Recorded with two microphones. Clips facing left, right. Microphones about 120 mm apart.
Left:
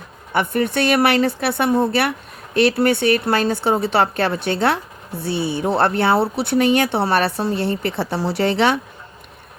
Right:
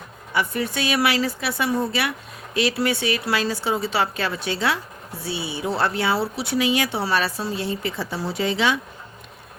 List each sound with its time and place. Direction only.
0.3 s speech: 55° left (ahead or behind)